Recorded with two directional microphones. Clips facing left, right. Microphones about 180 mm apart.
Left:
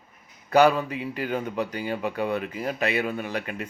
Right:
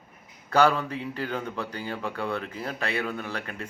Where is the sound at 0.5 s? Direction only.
15° left (ahead or behind).